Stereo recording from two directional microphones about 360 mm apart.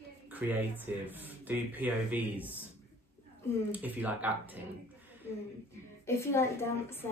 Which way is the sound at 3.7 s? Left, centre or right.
Centre.